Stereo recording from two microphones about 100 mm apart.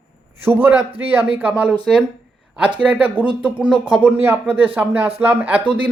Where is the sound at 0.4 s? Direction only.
20° right (ahead or behind).